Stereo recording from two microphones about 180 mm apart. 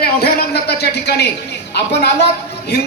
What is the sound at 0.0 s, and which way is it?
A woman's voice, 60° left (ahead or behind).